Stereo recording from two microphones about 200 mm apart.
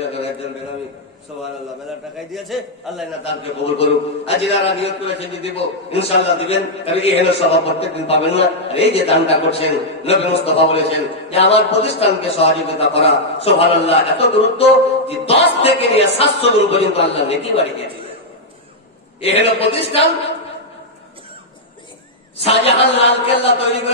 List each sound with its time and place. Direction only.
2.1 s a man's voice: centre (ahead or behind)
3.6 s a man's voice: 30° left (ahead or behind)
13.8 s a sound: 30° left (ahead or behind)
19.2 s a man's voice: 30° left (ahead or behind)
22.4 s a man's voice: 30° left (ahead or behind)